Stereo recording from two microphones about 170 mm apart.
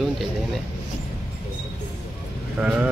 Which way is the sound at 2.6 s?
5° right (ahead or behind).